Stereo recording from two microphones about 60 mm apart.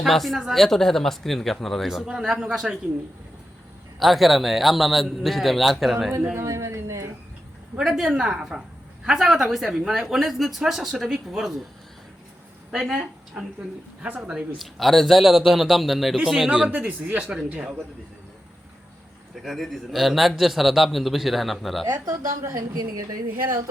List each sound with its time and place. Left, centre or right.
0.0 s a man's voice: centre
2.0 s a woman's voice: centre
4.0 s a man's voice: centre
6.3 s speech: right
7.8 s a woman's voice: centre
12.7 s speech: centre
14.6 s a man's voice: centre
19.4 s a man's voice: centre
22.1 s a woman's voice: right